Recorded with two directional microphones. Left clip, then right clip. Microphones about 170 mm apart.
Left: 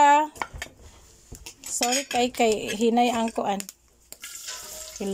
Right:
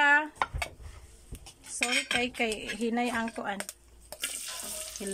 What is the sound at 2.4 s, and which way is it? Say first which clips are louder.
Speech: left 9 dB; 20° left (ahead or behind).